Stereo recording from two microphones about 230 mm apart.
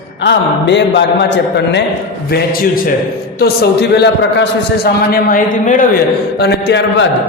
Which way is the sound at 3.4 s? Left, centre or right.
Left.